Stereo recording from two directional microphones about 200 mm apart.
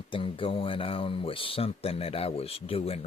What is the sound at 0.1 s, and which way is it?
Speech, 25° left (ahead or behind).